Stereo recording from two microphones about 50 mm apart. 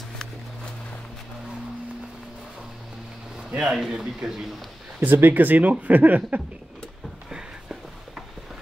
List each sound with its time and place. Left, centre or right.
3.4 s speech: centre
5.0 s speech: right